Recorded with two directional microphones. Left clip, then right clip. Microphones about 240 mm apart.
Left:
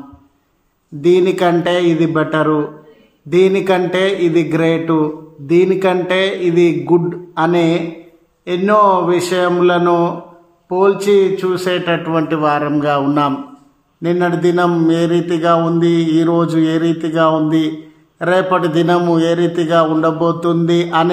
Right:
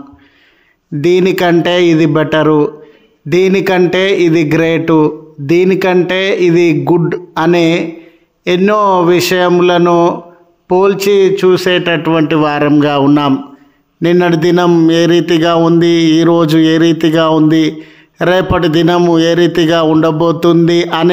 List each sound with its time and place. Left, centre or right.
1.0 s a man's voice: right